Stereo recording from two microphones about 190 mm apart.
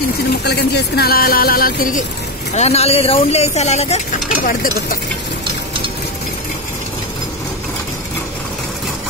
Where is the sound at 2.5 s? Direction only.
35° left (ahead or behind).